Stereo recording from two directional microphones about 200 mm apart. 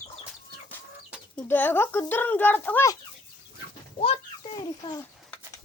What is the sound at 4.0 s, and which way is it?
A child's voice, 25° left (ahead or behind).